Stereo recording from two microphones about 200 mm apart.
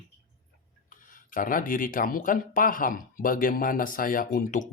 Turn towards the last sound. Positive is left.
turn(degrees=40)  # may be behind; listen again after turning